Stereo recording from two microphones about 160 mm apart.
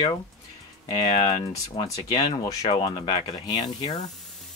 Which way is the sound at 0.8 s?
40° left (ahead or behind).